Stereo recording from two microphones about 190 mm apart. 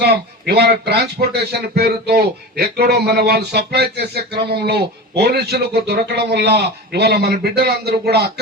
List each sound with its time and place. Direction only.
0.0 s speech: 60° right (ahead or behind)